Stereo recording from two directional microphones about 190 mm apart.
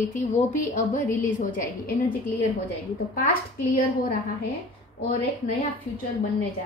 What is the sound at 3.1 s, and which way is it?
Speech, 50° left (ahead or behind).